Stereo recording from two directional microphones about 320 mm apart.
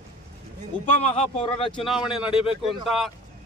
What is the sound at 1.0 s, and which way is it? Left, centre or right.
Speech, centre.